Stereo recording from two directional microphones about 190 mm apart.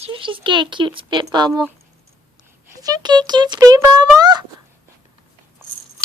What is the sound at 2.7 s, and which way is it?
Speech, 20° right (ahead or behind).